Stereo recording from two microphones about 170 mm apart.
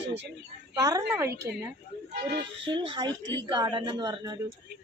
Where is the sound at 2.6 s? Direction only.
30° right (ahead or behind).